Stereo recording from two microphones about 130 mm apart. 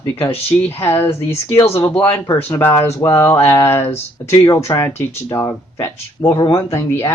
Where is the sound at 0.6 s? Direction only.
15° left (ahead or behind).